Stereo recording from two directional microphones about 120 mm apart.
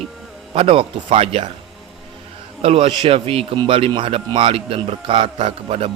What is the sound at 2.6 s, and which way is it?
Speech, 50° right (ahead or behind).